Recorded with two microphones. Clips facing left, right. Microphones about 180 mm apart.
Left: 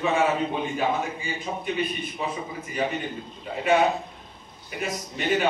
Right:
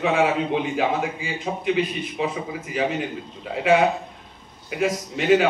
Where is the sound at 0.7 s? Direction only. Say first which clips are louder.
Right 3 dB; 90° right.